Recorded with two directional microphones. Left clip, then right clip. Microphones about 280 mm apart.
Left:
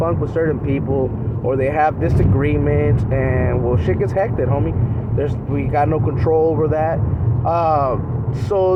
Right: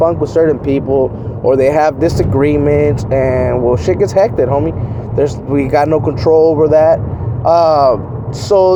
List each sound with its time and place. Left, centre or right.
0.0 s speech: centre